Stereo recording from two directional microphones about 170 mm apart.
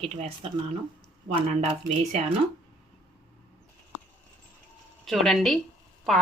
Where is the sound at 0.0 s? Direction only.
35° right (ahead or behind).